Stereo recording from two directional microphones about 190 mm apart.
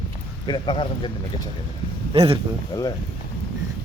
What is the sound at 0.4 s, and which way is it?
Speech, 25° left (ahead or behind).